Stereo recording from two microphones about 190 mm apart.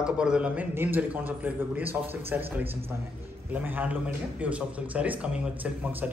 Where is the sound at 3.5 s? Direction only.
10° right (ahead or behind).